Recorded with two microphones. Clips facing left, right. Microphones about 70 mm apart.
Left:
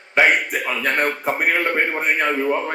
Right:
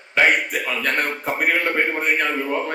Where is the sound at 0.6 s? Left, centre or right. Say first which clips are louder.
Left 1 dB; centre.